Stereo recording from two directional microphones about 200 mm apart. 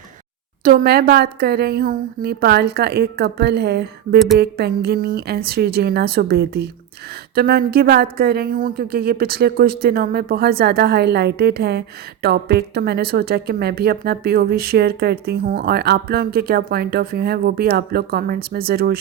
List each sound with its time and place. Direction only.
0.6 s speech: 45° right (ahead or behind)